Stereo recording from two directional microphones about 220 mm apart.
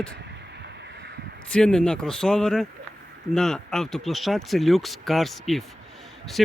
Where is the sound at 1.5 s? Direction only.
5° left (ahead or behind).